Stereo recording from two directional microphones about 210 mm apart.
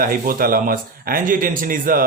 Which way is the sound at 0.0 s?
40° right (ahead or behind).